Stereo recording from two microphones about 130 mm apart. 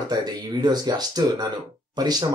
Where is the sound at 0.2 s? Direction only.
30° right (ahead or behind).